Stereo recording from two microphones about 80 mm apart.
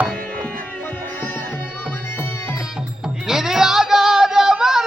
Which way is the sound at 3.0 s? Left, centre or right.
Centre.